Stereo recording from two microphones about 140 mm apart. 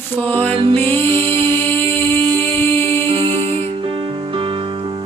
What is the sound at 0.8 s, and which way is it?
Music, 15° left (ahead or behind).